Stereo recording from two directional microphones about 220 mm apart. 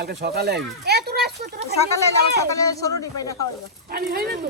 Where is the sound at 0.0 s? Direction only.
50° right (ahead or behind).